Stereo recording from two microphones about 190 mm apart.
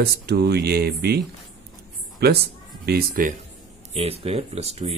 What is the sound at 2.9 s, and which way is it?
Speech, 50° right (ahead or behind).